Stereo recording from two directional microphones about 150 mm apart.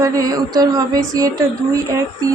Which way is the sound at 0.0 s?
25° right (ahead or behind).